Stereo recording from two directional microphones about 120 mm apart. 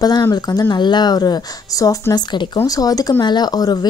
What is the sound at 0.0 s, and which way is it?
Speech, 35° left (ahead or behind).